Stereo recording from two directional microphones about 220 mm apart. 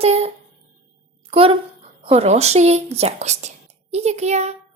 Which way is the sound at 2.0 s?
30° right (ahead or behind).